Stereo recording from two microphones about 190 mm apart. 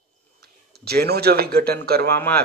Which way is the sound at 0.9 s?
55° right (ahead or behind).